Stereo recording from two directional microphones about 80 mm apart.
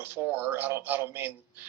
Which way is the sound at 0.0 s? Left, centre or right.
Right.